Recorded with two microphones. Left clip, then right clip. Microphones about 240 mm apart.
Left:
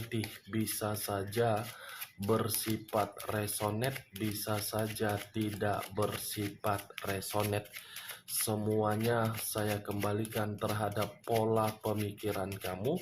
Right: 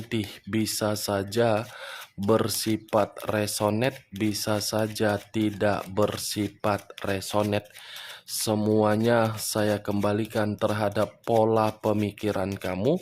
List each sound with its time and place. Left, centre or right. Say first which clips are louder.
0.5 s speech: right 10 dB; right